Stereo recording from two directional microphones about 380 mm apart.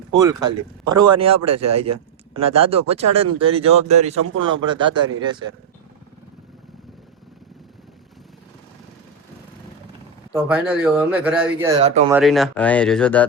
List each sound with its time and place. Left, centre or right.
0.2 s speech: centre
10.3 s speech: centre
11.7 s speech: centre
12.1 s speech: centre